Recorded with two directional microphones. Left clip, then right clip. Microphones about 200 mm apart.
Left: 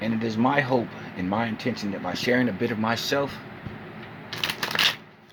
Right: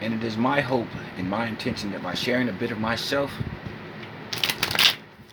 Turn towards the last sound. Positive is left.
turn(degrees=-5)  # may be behind; listen again after turning